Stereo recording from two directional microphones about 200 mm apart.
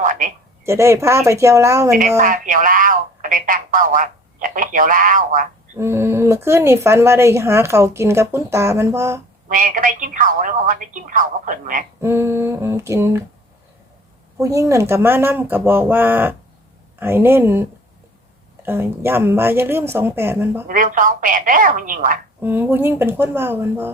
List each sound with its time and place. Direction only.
0.0 s speech: 40° right (ahead or behind)
0.6 s speech: 15° right (ahead or behind)
2.0 s speech: 40° right (ahead or behind)
5.7 s speech: 15° right (ahead or behind)
9.5 s a woman's voice: 40° right (ahead or behind)
12.0 s speech: 15° right (ahead or behind)
14.3 s speech: 15° right (ahead or behind)
20.7 s a woman's voice: 40° right (ahead or behind)
22.4 s speech: 10° right (ahead or behind)